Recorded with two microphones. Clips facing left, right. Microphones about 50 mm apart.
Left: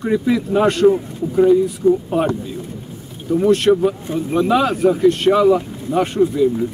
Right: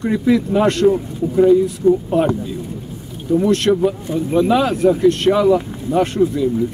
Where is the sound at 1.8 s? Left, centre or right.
Right.